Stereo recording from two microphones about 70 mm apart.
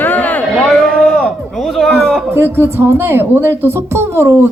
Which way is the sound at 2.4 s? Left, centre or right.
Right.